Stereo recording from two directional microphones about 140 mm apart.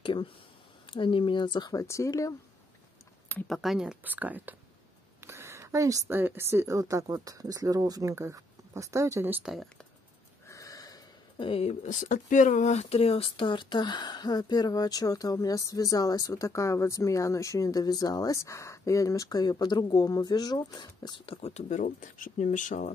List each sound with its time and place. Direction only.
0.0 s speech: 35° left (ahead or behind)
3.4 s a woman's voice: centre (ahead or behind)
10.4 s a sound: 25° left (ahead or behind)
11.3 s speech: 40° left (ahead or behind)
11.8 s speech: 65° left (ahead or behind)